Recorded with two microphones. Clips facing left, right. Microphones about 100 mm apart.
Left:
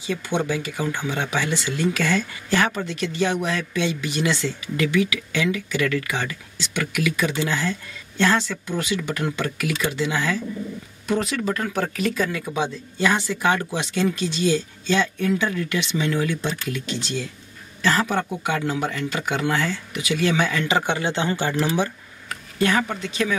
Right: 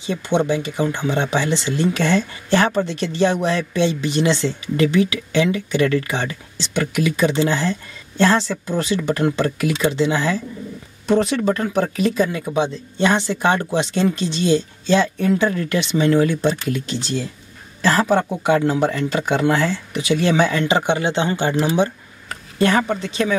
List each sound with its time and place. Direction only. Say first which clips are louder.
0.0 s speech: right 5 dB; 25° right (ahead or behind)
22.3 s speech: right 4 dB; 35° right (ahead or behind)